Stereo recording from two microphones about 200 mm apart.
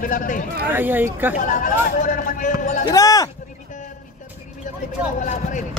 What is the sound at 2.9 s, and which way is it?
Speech, 15° left (ahead or behind).